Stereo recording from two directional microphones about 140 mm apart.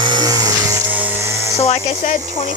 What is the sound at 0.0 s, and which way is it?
Music, 30° right (ahead or behind).